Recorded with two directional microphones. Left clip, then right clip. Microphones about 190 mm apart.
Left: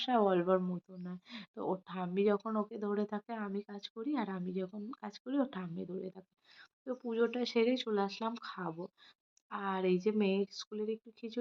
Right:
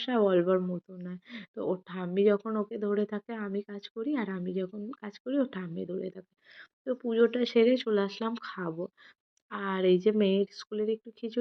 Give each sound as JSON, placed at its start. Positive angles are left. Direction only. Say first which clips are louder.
{"t": 0.0, "sound": "speech", "louder": "right 4 dB", "side_deg": -10}